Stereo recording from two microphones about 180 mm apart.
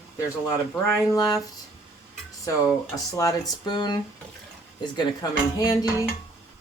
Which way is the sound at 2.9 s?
20° left (ahead or behind).